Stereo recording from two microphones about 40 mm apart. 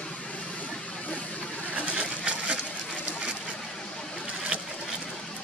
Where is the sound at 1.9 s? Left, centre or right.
Right.